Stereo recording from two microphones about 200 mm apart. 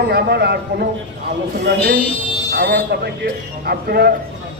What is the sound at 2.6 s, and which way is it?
A man's voice, 55° right (ahead or behind).